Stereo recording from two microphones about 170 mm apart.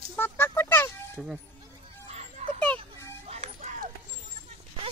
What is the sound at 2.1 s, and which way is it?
Music, 40° right (ahead or behind).